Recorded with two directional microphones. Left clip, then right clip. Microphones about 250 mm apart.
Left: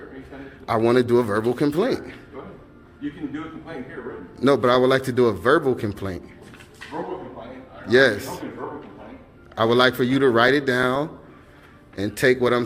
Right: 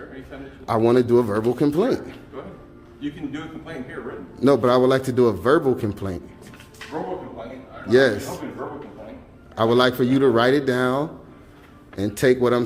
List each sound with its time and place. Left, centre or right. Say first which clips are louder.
0.6 s a man's voice: right 1 dB; centre
4.4 s a man's voice: right 1 dB; centre
7.9 s a man's voice: even; centre
9.6 s a man's voice: even; centre